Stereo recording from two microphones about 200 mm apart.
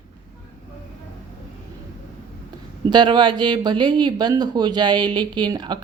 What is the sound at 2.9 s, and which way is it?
Speech, 20° right (ahead or behind).